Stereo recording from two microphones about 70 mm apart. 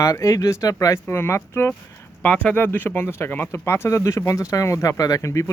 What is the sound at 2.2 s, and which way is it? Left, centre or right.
Speech, centre.